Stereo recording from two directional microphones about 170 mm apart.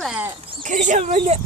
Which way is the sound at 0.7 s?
45° right (ahead or behind).